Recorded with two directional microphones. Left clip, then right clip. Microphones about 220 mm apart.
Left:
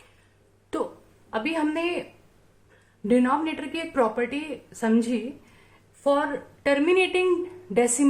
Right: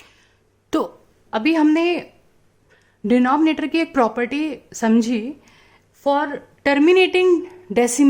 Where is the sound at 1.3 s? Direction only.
45° right (ahead or behind).